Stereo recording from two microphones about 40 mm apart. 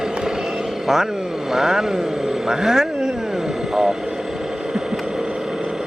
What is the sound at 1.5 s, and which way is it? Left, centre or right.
Speech, centre.